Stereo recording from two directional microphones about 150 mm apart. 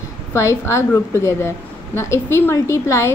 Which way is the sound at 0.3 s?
20° left (ahead or behind).